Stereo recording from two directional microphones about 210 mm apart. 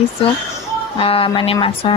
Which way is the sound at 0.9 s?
25° left (ahead or behind).